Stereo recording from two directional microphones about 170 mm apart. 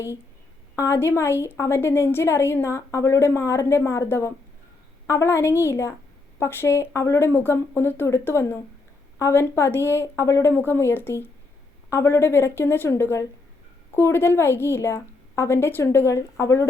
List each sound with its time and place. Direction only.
0.8 s a woman's voice: 15° left (ahead or behind)